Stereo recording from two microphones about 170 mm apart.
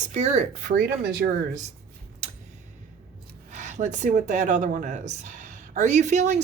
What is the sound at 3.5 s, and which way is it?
A woman's voice, 45° right (ahead or behind).